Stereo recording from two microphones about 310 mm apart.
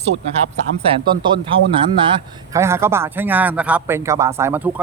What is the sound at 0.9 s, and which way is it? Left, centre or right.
Speech, centre.